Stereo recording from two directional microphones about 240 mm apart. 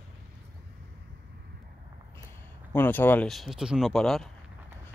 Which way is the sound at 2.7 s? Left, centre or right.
Centre.